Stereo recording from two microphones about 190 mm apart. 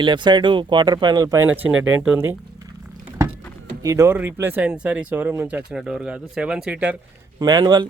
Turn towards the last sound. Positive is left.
turn(degrees=-20)  # may be behind; listen again after turning